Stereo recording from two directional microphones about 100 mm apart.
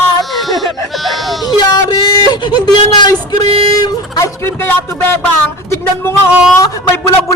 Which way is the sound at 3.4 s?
80° right.